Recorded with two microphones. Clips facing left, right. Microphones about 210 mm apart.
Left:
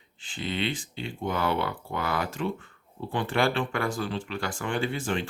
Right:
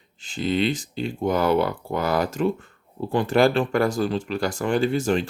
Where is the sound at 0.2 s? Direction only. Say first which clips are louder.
Right 8 dB; 40° right (ahead or behind).